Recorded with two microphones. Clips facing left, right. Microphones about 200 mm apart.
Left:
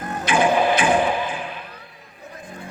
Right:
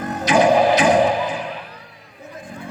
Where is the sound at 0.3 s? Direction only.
40° right (ahead or behind).